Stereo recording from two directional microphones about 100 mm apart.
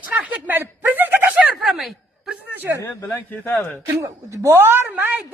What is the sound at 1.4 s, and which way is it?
Speech, 5° right (ahead or behind).